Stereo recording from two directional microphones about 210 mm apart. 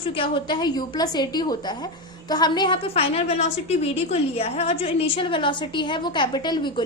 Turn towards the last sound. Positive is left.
turn(degrees=20)  # may be behind; listen again after turning